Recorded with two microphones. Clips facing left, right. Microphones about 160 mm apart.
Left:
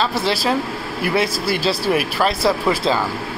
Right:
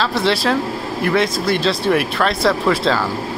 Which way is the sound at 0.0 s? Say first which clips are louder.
Right 2 dB; 5° left (ahead or behind).